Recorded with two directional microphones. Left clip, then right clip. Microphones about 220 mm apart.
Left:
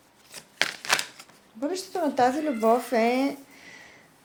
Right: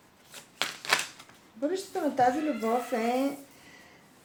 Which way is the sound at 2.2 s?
45° left (ahead or behind).